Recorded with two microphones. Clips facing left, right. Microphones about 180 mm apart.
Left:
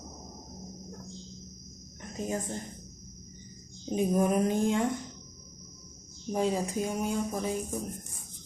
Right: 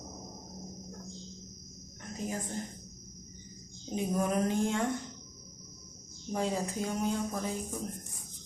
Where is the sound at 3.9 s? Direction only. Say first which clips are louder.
Left 4 dB; 15° left (ahead or behind).